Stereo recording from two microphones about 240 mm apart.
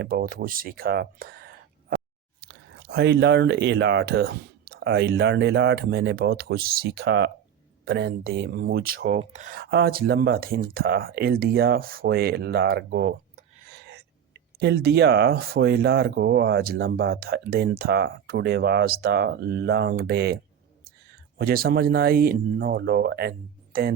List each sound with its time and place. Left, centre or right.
0.0 s speech: right